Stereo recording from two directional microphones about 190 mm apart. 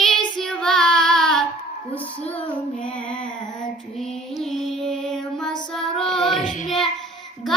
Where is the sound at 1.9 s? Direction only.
30° left (ahead or behind).